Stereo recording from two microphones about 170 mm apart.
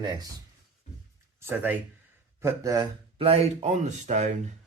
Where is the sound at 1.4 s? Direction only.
10° right (ahead or behind).